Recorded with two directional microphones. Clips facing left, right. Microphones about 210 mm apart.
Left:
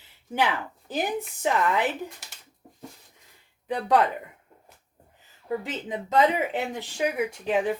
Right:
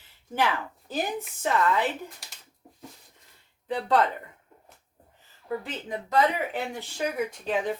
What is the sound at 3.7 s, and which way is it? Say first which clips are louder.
Speech: left 2 dB; 15° left (ahead or behind).